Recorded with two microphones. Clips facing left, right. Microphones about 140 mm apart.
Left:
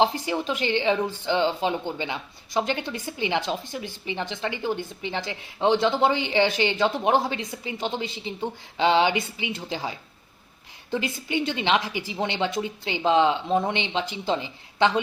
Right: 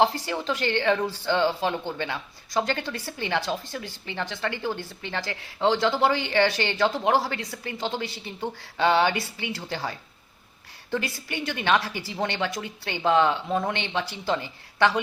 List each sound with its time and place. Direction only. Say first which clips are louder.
0.0 s a woman's voice: left 1 dB; 20° left (ahead or behind)
10.9 s a woman's voice: left 3 dB; 15° left (ahead or behind)